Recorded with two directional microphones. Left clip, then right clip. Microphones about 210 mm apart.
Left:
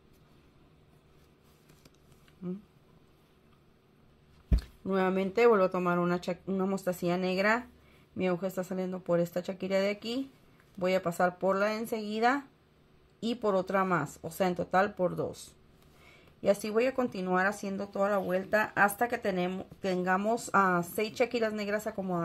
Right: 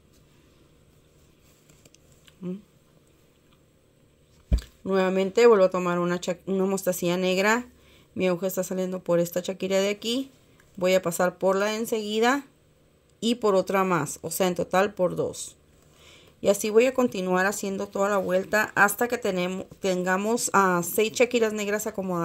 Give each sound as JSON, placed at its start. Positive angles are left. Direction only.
{"t": 4.6, "sound": "speech", "side_deg": -25}
{"t": 16.3, "sound": "speech", "side_deg": -40}